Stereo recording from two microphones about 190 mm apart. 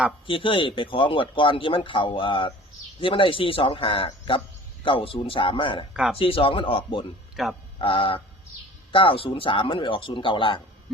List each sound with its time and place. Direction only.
0.3 s a man's voice: 25° left (ahead or behind)
5.9 s speech: 5° right (ahead or behind)
6.1 s a man's voice: 30° left (ahead or behind)
7.4 s speech: centre (ahead or behind)
7.8 s a man's voice: 30° left (ahead or behind)